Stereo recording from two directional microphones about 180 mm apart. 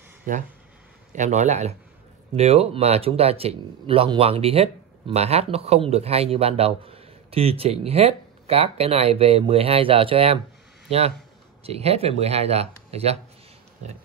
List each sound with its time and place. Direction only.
0.3 s speech: 50° right (ahead or behind)